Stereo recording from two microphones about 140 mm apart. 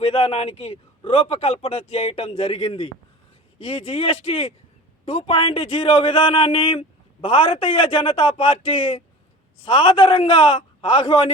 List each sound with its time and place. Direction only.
0.0 s a man's voice: 45° left (ahead or behind)